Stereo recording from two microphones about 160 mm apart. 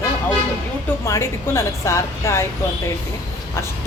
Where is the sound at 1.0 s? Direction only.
15° left (ahead or behind).